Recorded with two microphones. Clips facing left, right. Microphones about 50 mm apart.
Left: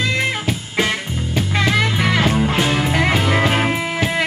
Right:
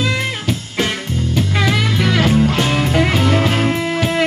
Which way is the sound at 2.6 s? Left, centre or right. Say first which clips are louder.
Right 1 dB; centre.